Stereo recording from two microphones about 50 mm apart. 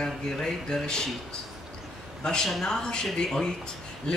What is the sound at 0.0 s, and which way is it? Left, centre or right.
Speech, centre.